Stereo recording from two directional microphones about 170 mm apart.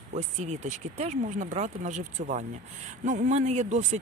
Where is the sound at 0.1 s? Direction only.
40° right (ahead or behind).